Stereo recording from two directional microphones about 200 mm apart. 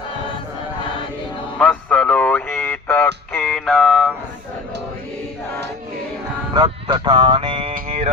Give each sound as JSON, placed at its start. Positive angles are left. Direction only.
{"t": 1.5, "sound": "a sound", "side_deg": 5}
{"t": 6.5, "sound": "speech", "side_deg": -25}
{"t": 7.7, "sound": "music", "side_deg": -30}